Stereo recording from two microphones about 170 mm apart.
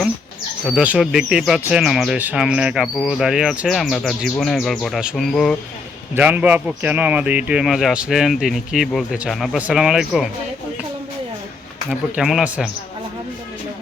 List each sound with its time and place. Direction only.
0.6 s speech: 5° right (ahead or behind)
6.1 s speech: 10° right (ahead or behind)
11.9 s speech: 5° right (ahead or behind)